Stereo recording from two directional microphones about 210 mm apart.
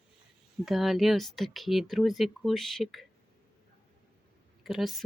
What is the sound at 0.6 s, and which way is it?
Speech, centre (ahead or behind).